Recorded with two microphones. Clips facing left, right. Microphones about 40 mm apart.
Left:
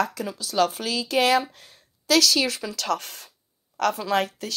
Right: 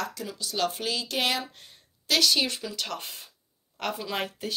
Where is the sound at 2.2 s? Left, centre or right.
Centre.